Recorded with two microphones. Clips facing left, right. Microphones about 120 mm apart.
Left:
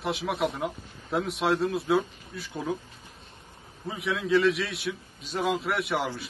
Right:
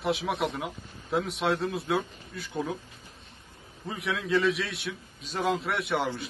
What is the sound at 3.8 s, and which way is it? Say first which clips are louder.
A man's voice: left 2 dB; centre (ahead or behind).